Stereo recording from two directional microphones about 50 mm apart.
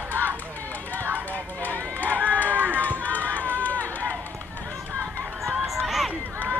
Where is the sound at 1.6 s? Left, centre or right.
Left.